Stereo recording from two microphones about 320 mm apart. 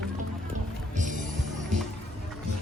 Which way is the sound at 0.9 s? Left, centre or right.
Right.